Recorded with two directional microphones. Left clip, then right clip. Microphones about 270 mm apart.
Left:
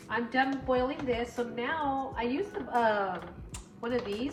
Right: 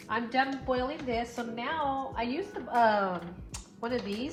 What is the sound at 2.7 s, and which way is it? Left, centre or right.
Speech, right.